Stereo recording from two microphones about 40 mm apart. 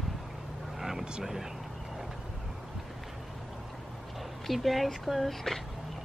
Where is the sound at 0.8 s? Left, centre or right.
Centre.